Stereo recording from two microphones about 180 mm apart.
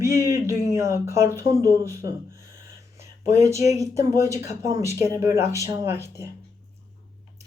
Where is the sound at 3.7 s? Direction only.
15° right (ahead or behind).